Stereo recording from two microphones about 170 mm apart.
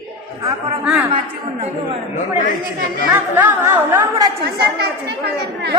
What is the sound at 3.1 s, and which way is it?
Speech, 10° right (ahead or behind).